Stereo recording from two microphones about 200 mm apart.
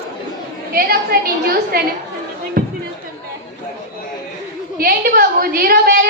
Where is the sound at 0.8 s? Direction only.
50° right (ahead or behind).